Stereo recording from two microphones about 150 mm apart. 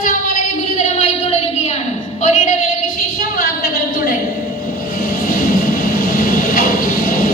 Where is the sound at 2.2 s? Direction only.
55° left (ahead or behind).